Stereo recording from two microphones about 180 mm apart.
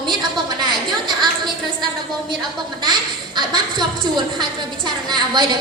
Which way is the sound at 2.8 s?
25° right (ahead or behind).